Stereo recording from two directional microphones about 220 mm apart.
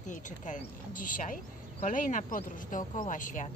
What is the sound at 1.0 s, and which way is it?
Speech, 35° left (ahead or behind).